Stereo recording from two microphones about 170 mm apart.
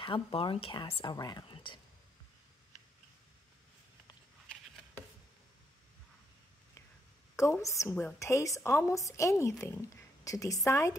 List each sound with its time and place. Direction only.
0.0 s speech: 30° left (ahead or behind)
7.3 s a woman's voice: 20° left (ahead or behind)